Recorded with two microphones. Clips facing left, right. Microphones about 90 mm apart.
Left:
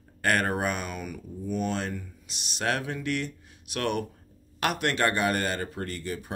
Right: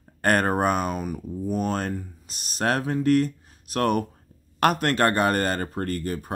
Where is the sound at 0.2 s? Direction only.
45° right (ahead or behind).